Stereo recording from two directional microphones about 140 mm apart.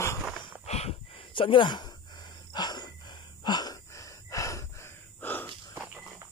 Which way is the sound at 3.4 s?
30° left (ahead or behind).